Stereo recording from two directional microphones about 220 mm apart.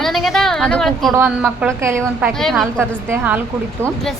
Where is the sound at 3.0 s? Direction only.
10° right (ahead or behind).